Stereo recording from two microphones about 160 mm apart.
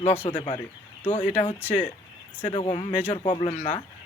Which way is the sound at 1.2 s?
45° left (ahead or behind).